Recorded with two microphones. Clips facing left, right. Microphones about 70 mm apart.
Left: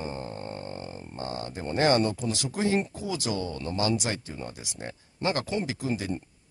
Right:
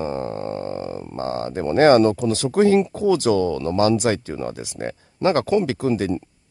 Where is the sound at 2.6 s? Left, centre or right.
Right.